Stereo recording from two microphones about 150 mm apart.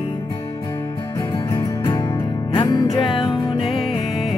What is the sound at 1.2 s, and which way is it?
Music, 20° left (ahead or behind).